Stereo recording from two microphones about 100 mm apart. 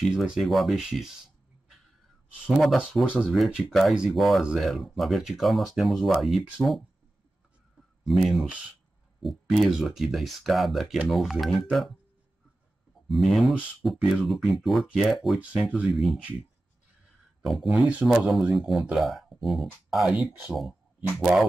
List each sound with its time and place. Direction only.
0.1 s speech: 5° right (ahead or behind)
2.4 s speech: centre (ahead or behind)
8.0 s speech: centre (ahead or behind)
13.3 s speech: centre (ahead or behind)
15.5 s speech: 10° right (ahead or behind)
15.9 s speech: centre (ahead or behind)
17.4 s speech: centre (ahead or behind)
17.6 s speech: 15° right (ahead or behind)
18.0 s speech: centre (ahead or behind)
20.1 s speech: 10° right (ahead or behind)